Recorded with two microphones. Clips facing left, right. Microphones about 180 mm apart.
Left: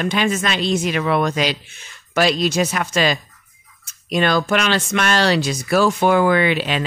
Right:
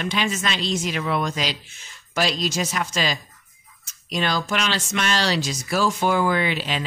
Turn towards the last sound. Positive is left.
turn(degrees=65)  # may be behind; listen again after turning